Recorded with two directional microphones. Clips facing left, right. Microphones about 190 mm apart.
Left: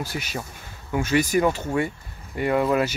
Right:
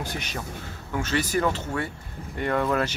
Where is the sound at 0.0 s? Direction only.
5° left (ahead or behind).